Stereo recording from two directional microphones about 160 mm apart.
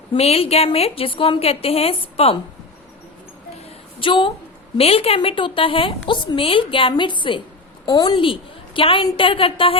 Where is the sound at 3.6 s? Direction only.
30° left (ahead or behind).